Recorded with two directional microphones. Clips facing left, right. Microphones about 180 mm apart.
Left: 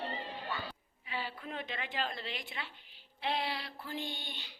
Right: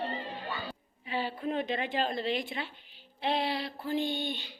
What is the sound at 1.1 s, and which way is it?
Speech, 30° right (ahead or behind).